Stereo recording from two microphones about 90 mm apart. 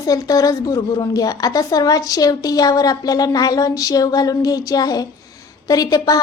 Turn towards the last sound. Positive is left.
turn(degrees=40)  # may be behind; listen again after turning